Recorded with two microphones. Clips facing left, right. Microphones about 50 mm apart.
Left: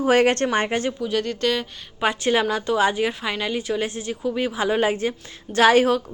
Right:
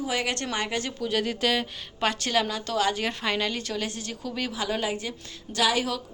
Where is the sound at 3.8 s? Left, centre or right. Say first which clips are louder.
Left 6 dB; left.